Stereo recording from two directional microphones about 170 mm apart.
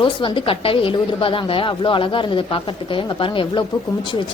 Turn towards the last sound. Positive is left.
turn(degrees=30)  # may be behind; listen again after turning